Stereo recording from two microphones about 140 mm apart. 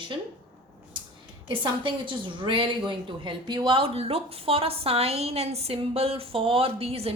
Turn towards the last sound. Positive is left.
turn(degrees=-45)  # may be behind; listen again after turning